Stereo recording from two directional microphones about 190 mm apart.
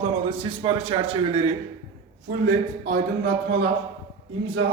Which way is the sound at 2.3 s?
45° right (ahead or behind).